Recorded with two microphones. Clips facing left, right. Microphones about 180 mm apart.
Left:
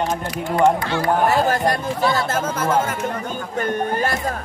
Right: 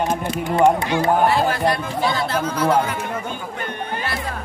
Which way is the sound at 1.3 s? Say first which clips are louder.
Left 1 dB; 45° left (ahead or behind).